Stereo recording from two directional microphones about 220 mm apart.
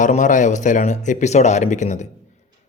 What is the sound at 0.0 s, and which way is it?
A man's voice, 35° left (ahead or behind).